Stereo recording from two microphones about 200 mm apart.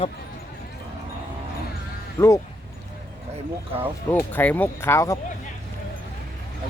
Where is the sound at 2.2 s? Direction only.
10° left (ahead or behind).